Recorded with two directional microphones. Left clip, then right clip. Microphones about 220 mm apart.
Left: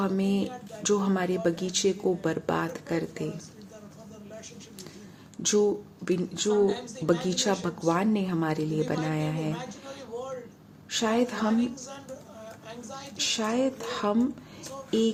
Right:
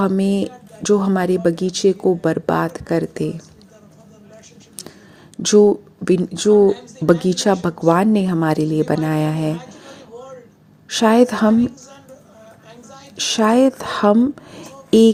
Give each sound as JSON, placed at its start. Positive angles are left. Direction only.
{"t": 0.0, "sound": "speech", "side_deg": -35}
{"t": 5.4, "sound": "speech", "side_deg": -30}
{"t": 6.5, "sound": "speech", "side_deg": 0}
{"t": 7.3, "sound": "speech", "side_deg": -30}
{"t": 9.5, "sound": "speech", "side_deg": 0}
{"t": 10.2, "sound": "a sound", "side_deg": 0}
{"t": 10.8, "sound": "speech", "side_deg": -35}
{"t": 11.5, "sound": "speech", "side_deg": 0}
{"t": 12.7, "sound": "a sound", "side_deg": 0}
{"t": 13.1, "sound": "speech", "side_deg": -35}
{"t": 14.6, "sound": "a sound", "side_deg": 0}
{"t": 14.8, "sound": "a sound", "side_deg": -40}